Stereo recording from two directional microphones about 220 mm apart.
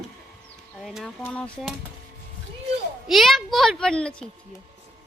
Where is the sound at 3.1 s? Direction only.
Centre (ahead or behind).